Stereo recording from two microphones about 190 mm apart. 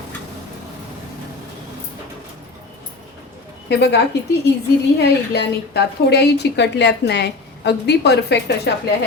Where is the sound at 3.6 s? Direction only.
65° left (ahead or behind).